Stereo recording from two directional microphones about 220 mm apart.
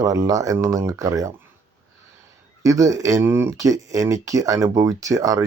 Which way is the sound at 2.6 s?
15° right (ahead or behind).